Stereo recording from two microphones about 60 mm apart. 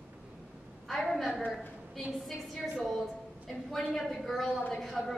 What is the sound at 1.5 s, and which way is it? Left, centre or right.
A woman's voice, centre.